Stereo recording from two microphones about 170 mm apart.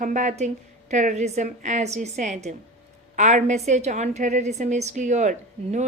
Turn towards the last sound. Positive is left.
turn(degrees=-45)  # may be behind; listen again after turning